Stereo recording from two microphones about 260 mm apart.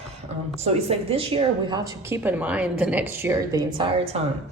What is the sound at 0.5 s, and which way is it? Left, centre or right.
A woman's voice, right.